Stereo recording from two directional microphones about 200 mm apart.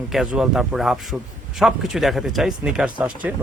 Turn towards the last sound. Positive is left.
turn(degrees=-5)  # may be behind; listen again after turning